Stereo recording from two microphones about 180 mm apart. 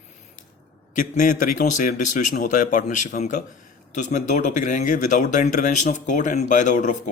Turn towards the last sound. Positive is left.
turn(degrees=45)  # may be behind; listen again after turning